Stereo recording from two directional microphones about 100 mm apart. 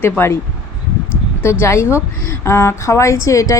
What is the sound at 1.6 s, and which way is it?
A woman's voice, 25° left (ahead or behind).